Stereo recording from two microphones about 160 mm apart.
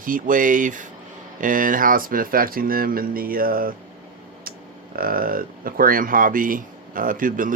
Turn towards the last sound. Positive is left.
turn(degrees=-55)  # may be behind; listen again after turning